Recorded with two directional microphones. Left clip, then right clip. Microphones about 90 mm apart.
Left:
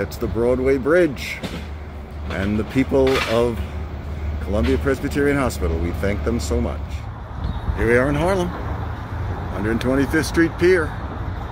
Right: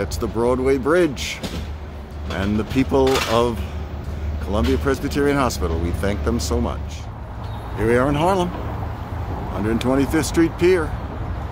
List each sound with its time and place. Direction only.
0.0 s speech: centre (ahead or behind)
7.7 s speech: 20° right (ahead or behind)
9.6 s speech: 15° right (ahead or behind)